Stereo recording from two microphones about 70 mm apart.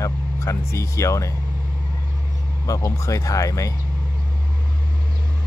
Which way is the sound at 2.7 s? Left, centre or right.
Left.